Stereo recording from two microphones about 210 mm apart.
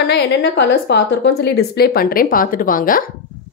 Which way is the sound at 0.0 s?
55° left (ahead or behind).